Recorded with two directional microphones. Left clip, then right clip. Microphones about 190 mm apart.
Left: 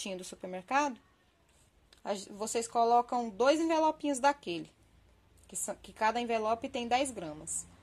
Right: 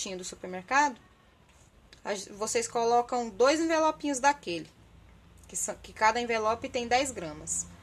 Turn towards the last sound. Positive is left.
turn(degrees=20)  # may be behind; listen again after turning